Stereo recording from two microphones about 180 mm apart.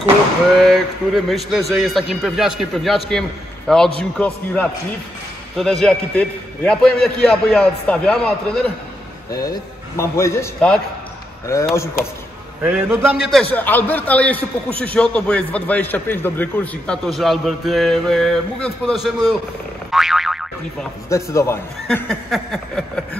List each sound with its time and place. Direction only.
0.6 s a man's voice: centre (ahead or behind)
5.6 s a man's voice: 5° left (ahead or behind)
11.7 s a man's voice: 15° left (ahead or behind)
12.6 s a man's voice: 5° right (ahead or behind)
19.9 s boing: centre (ahead or behind)
21.1 s a man's voice: 15° left (ahead or behind)
21.8 s a man's voice: centre (ahead or behind)